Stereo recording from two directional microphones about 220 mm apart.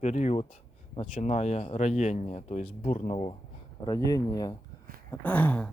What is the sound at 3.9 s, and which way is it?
Speech, 15° left (ahead or behind).